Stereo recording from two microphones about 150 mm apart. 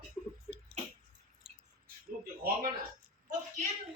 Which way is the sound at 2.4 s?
90° right.